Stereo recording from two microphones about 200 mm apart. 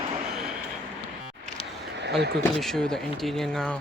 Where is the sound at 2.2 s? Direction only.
55° right (ahead or behind).